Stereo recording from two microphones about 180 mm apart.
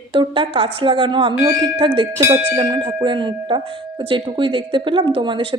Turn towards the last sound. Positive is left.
turn(degrees=-25)  # may be behind; listen again after turning